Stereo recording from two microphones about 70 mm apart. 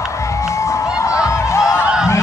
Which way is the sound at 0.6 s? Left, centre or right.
Left.